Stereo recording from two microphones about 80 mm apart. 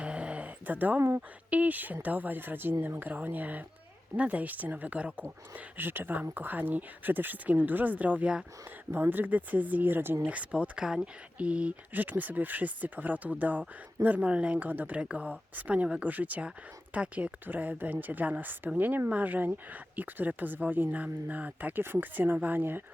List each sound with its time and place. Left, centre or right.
0.0 s a sound: centre
1.5 s speech: centre
8.9 s speech: right